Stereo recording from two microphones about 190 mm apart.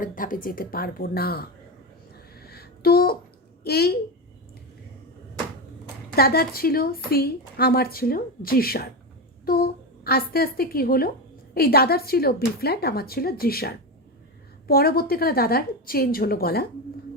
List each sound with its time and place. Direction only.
0.0 s a woman's voice: 45° left (ahead or behind)
2.4 s a sound: 55° left (ahead or behind)
3.6 s a woman's voice: 55° left (ahead or behind)
6.1 s a woman's voice: 55° left (ahead or behind)